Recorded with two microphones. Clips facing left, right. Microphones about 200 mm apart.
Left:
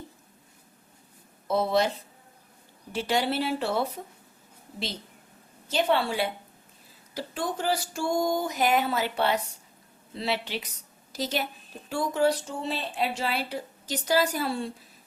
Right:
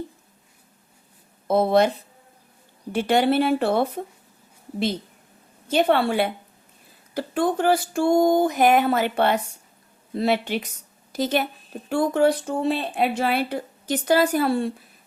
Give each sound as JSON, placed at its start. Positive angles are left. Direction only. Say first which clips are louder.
{"t": 1.5, "sound": "speech", "louder": "right 6 dB", "side_deg": -55}
{"t": 2.9, "sound": "speech", "louder": "right 7 dB", "side_deg": -55}
{"t": 5.6, "sound": "a woman's voice", "louder": "right 6 dB", "side_deg": -55}